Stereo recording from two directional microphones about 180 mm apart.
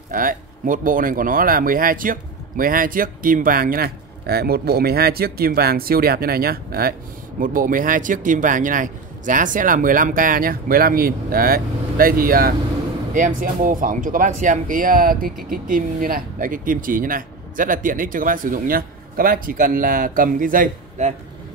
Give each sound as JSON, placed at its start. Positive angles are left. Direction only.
{"t": 0.1, "sound": "speech", "side_deg": -50}